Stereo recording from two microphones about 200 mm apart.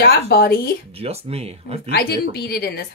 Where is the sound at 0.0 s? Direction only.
50° left (ahead or behind).